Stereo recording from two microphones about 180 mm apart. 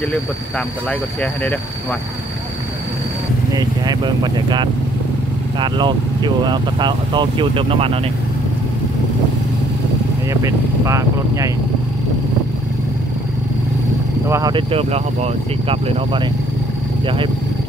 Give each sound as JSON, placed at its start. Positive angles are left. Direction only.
{"t": 0.8, "sound": "speech", "side_deg": 5}
{"t": 3.5, "sound": "speech", "side_deg": -25}
{"t": 10.3, "sound": "speech", "side_deg": -15}
{"t": 14.2, "sound": "speech", "side_deg": -15}
{"t": 14.5, "sound": "speech", "side_deg": -30}